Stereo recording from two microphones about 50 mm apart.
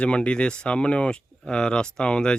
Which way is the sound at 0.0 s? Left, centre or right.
Left.